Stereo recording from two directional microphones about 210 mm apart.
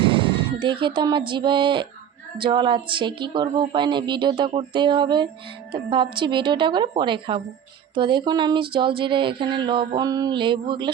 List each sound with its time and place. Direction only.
0.0 s speech: 25° right (ahead or behind)